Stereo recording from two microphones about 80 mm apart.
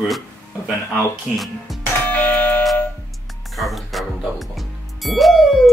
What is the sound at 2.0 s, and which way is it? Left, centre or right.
Doorbell, left.